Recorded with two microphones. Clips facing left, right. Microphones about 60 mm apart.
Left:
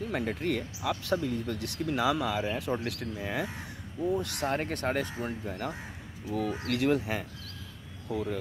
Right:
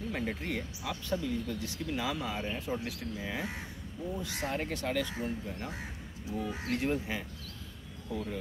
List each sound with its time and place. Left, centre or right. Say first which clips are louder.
0.1 s speech: left 5 dB; left
5.2 s speech: left 3 dB; left